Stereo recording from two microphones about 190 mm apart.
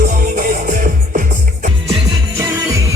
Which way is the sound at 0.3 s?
45° right (ahead or behind).